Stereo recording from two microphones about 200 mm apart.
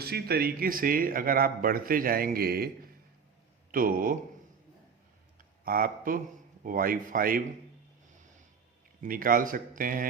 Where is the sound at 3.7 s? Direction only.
45° right (ahead or behind).